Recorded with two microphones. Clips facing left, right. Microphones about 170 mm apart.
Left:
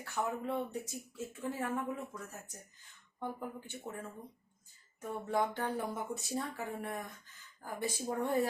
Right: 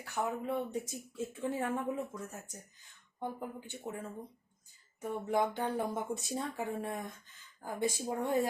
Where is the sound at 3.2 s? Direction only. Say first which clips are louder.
Right 1 dB; 15° right (ahead or behind).